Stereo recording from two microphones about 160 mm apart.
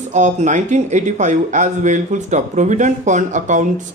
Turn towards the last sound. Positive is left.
turn(degrees=-50)  # may be behind; listen again after turning